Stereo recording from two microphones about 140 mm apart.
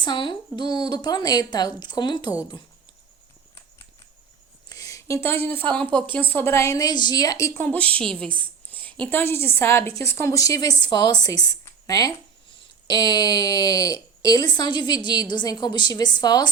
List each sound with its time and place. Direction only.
0.0 s a woman's voice: 35° left (ahead or behind)
4.7 s a sound: 25° left (ahead or behind)
5.7 s a woman's voice: 5° left (ahead or behind); by 7.6 s 25° left (ahead or behind)
7.6 s a woman's voice: 10° left (ahead or behind); by 16.5 s 30° left (ahead or behind)